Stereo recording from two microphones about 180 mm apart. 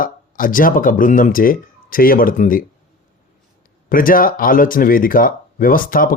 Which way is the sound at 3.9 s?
50° left (ahead or behind).